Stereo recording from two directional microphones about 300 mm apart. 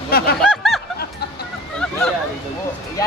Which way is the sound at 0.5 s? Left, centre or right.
Centre.